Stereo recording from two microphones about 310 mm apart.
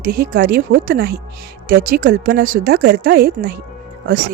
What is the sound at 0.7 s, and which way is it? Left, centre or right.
Speech, right.